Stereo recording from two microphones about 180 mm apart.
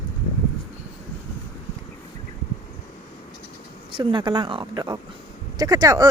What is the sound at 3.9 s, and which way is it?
Speech, 25° right (ahead or behind).